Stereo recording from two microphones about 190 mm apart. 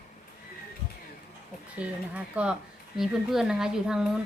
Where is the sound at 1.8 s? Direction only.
5° right (ahead or behind).